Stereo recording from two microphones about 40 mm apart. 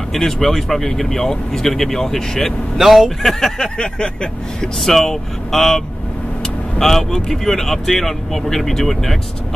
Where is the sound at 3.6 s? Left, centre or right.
Left.